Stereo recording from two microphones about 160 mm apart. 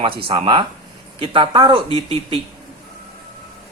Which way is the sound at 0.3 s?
35° right (ahead or behind).